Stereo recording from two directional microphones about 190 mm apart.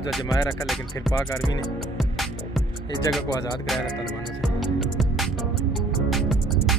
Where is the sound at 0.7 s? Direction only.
Centre (ahead or behind).